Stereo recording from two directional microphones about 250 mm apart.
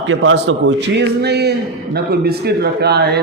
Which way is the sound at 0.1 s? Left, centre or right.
Right.